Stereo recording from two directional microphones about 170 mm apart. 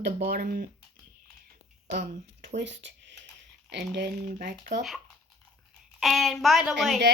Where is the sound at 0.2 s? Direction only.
60° right (ahead or behind).